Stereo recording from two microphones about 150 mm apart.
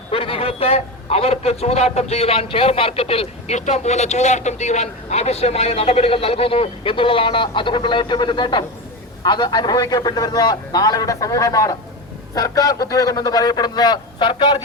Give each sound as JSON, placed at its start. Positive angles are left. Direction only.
{"t": 0.1, "sound": "a man's voice", "side_deg": 40}